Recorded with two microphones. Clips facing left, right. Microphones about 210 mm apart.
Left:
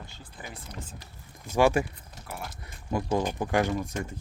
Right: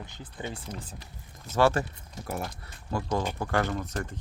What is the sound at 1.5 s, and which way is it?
Speech, 15° left (ahead or behind).